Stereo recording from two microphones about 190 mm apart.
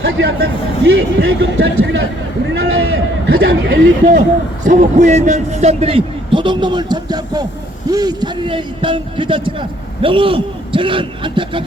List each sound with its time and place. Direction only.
0.0 s speech: 60° right (ahead or behind)
4.6 s a man's voice: 40° right (ahead or behind); by 11.6 s 25° right (ahead or behind)